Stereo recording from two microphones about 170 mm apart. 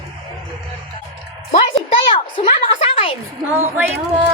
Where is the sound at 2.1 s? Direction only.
30° left (ahead or behind).